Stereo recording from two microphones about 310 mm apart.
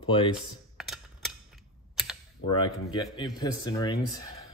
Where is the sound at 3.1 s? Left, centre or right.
Centre.